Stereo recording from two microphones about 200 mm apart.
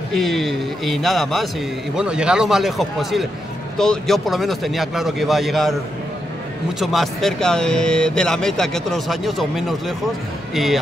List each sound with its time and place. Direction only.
0.1 s speech: centre (ahead or behind)
6.8 s speech: centre (ahead or behind)